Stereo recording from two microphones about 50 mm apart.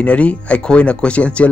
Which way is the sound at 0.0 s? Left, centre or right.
Left.